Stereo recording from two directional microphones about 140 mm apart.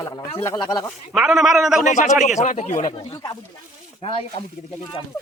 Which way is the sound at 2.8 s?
30° left (ahead or behind).